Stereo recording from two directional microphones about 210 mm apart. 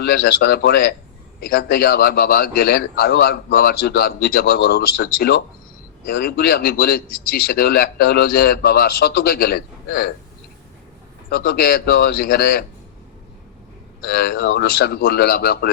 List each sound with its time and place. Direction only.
0.0 s a man's voice: 45° left (ahead or behind)
11.3 s a man's voice: 45° left (ahead or behind)
14.1 s a man's voice: 45° left (ahead or behind)